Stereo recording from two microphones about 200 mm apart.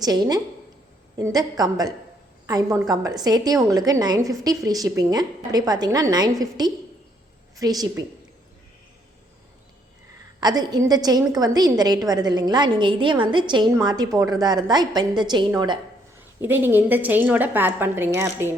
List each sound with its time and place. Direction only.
0.0 s a woman's voice: 20° right (ahead or behind)
10.4 s a woman's voice: 20° right (ahead or behind)
16.4 s a woman's voice: 10° right (ahead or behind)